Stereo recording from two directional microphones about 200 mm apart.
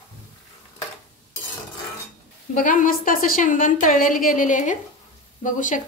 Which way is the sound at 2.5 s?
40° left (ahead or behind).